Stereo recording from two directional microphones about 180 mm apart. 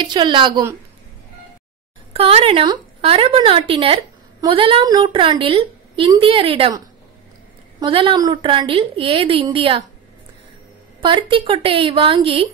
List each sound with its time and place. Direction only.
0.0 s a woman's voice: 25° right (ahead or behind)
2.1 s a woman's voice: 35° right (ahead or behind)
7.8 s a woman's voice: 30° right (ahead or behind)
11.0 s a woman's voice: 25° right (ahead or behind)